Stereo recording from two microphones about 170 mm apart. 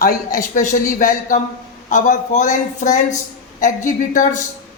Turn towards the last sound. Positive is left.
turn(degrees=50)  # may be behind; listen again after turning